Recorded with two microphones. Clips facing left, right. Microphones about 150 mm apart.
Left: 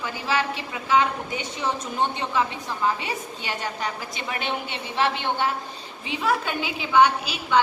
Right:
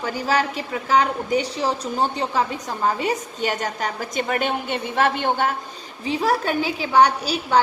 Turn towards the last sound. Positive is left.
turn(degrees=-40)  # may be behind; listen again after turning